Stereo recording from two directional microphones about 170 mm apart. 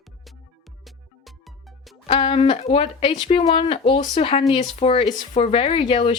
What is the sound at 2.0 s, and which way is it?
Speech, 35° left (ahead or behind).